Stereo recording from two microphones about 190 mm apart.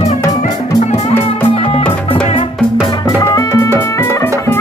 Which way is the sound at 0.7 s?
40° left (ahead or behind).